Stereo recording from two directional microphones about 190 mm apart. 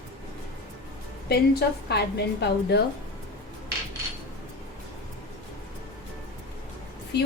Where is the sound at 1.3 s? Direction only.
60° left (ahead or behind).